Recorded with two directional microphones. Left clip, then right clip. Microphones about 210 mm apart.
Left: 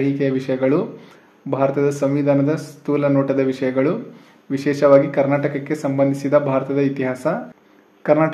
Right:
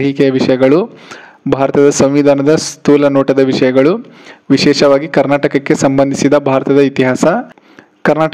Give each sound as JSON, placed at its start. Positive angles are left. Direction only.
{"t": 0.0, "sound": "speech", "side_deg": -40}